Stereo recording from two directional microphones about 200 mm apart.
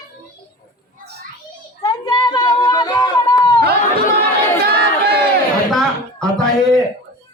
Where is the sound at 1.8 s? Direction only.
20° left (ahead or behind).